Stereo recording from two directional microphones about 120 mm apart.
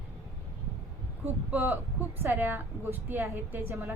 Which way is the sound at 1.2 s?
15° right (ahead or behind).